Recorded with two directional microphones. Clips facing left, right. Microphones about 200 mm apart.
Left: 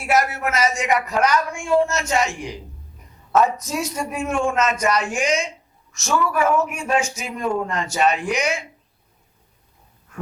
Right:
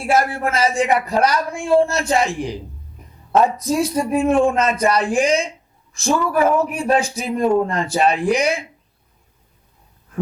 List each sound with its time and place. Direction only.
0.0 s a man's voice: 30° right (ahead or behind)